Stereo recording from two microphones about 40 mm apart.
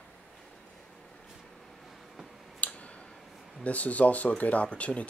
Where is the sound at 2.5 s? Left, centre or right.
Left.